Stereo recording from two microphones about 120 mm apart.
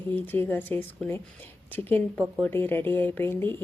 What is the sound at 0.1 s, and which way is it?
A woman's voice, 15° left (ahead or behind).